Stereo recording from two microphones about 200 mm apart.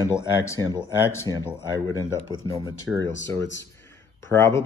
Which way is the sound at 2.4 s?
15° left (ahead or behind).